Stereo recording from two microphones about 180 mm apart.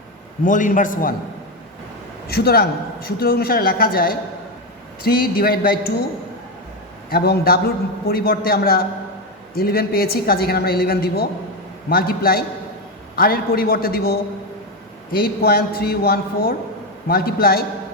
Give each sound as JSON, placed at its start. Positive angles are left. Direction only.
{"t": 0.4, "sound": "a man's voice", "side_deg": 45}
{"t": 2.2, "sound": "a man's voice", "side_deg": 60}
{"t": 7.1, "sound": "a man's voice", "side_deg": 60}